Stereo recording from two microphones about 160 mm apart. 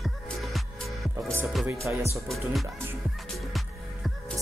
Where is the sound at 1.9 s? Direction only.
10° right (ahead or behind).